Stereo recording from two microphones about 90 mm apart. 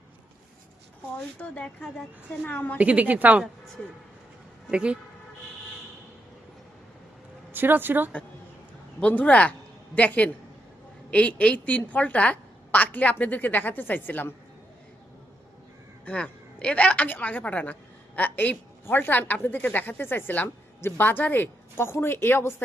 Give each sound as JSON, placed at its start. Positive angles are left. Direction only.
{"t": 1.4, "sound": "a woman's voice", "side_deg": 15}
{"t": 2.7, "sound": "a woman's voice", "side_deg": -15}
{"t": 4.7, "sound": "a woman's voice", "side_deg": -10}
{"t": 7.5, "sound": "a woman's voice", "side_deg": -20}
{"t": 9.0, "sound": "a woman's voice", "side_deg": 15}
{"t": 16.0, "sound": "a woman's voice", "side_deg": 15}